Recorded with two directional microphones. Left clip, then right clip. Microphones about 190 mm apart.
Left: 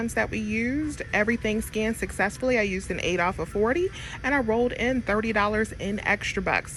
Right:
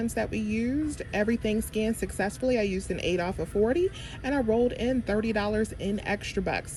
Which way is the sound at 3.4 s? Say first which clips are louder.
Left 1 dB; 15° left (ahead or behind).